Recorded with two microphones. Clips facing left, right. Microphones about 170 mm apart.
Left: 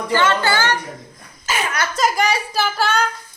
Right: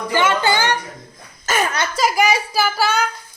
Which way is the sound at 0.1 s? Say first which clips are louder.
Even; 15° right (ahead or behind).